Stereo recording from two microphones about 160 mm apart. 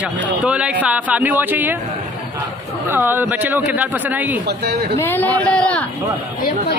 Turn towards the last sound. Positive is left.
turn(degrees=10)  # may be behind; listen again after turning